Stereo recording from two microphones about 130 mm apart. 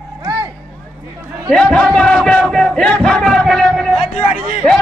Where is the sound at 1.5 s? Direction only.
5° left (ahead or behind).